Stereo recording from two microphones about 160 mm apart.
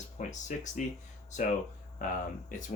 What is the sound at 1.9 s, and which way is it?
Speech, 55° left (ahead or behind).